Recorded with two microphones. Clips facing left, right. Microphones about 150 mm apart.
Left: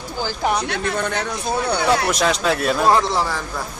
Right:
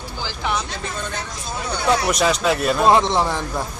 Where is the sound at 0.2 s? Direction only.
45° left (ahead or behind).